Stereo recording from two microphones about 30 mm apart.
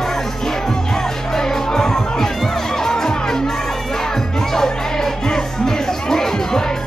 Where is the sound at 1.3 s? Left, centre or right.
Centre.